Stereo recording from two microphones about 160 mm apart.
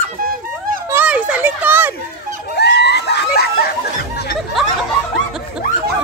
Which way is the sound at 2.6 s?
90° left.